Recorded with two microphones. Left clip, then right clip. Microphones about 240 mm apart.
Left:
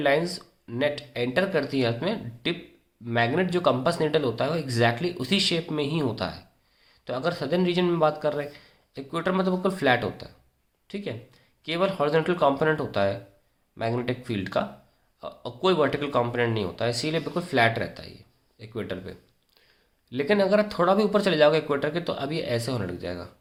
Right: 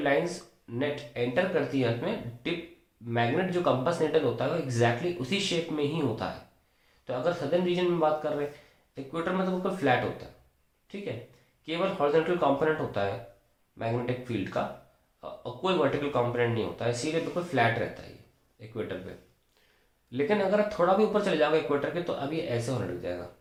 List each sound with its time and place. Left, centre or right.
0.7 s speech: left